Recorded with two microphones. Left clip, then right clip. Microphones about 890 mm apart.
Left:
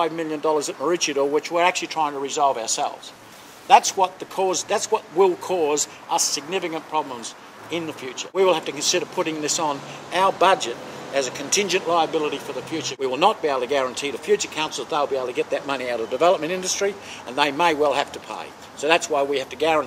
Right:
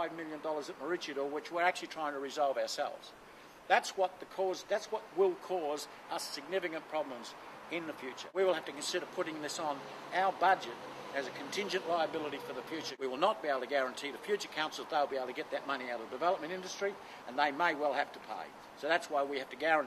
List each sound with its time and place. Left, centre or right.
0.0 s speech: left